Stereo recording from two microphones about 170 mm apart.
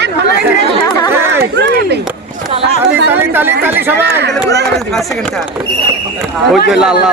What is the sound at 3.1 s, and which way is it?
Speech, 10° right (ahead or behind).